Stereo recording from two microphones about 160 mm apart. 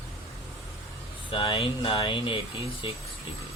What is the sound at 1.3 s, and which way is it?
Speech, 35° left (ahead or behind).